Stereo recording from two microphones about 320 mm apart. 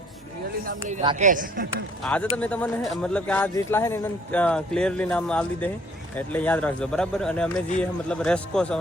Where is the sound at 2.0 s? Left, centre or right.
Centre.